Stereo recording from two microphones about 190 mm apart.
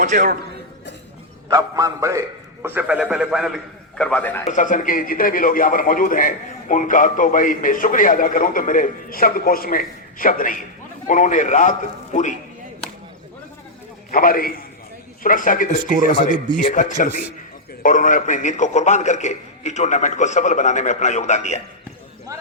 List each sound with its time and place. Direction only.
0.0 s a man's voice: 45° right (ahead or behind)
1.5 s a man's voice: 20° right (ahead or behind); by 4.4 s 10° left (ahead or behind)
4.4 s a man's voice: 40° left (ahead or behind)
14.1 s a man's voice: 50° left (ahead or behind)